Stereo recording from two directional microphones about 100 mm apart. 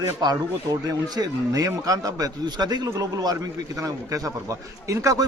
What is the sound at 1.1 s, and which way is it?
A man's voice, 40° right (ahead or behind).